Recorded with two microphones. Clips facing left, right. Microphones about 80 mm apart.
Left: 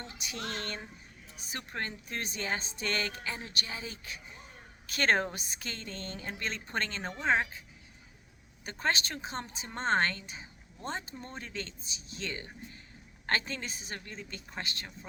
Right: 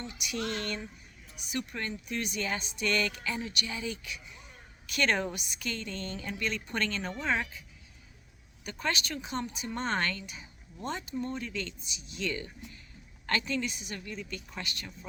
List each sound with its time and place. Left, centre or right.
0.1 s speech: left
8.6 s speech: left